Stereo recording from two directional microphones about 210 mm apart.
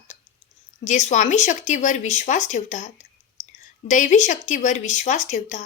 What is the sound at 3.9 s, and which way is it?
Speech, 35° left (ahead or behind).